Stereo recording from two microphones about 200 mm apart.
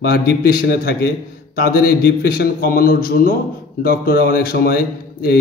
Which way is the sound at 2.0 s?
50° left (ahead or behind).